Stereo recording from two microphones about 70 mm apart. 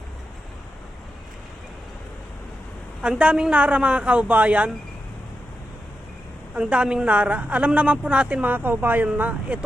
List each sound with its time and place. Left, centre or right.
3.0 s a woman's voice: centre
6.6 s a woman's voice: centre